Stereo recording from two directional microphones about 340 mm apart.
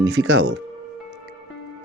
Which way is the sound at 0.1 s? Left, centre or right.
Right.